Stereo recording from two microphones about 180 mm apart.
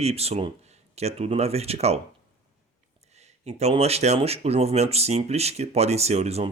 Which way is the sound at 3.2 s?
35° right (ahead or behind).